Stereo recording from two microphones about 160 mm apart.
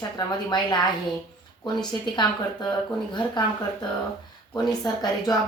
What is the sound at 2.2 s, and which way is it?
Speech, 25° left (ahead or behind).